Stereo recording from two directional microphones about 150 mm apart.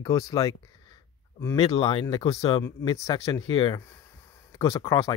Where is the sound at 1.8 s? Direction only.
35° left (ahead or behind).